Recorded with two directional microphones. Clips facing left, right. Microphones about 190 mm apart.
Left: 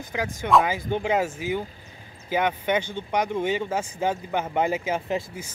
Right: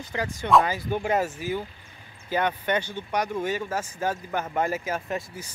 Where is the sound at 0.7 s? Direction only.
20° left (ahead or behind).